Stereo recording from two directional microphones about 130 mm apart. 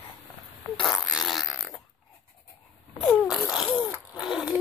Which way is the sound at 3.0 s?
Centre (ahead or behind).